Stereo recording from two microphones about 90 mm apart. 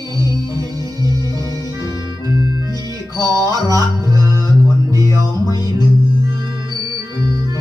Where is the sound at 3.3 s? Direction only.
40° right (ahead or behind).